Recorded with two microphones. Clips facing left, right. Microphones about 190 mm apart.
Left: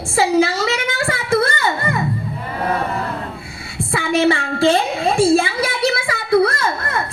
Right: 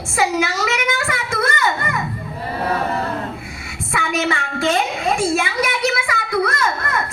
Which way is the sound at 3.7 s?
30° left (ahead or behind).